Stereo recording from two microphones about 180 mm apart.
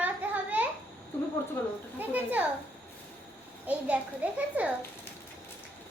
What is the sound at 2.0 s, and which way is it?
Children playing, 10° right (ahead or behind).